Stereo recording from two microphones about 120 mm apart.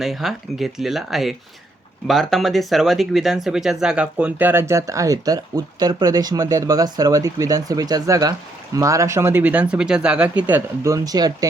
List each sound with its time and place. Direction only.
0.0 s speech: centre (ahead or behind)
10.8 s speech: 30° right (ahead or behind)